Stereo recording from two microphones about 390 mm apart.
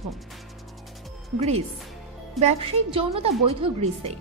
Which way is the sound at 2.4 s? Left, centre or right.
Centre.